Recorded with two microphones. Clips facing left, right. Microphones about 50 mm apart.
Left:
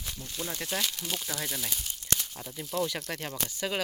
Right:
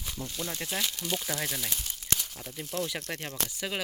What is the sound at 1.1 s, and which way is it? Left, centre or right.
Speech, centre.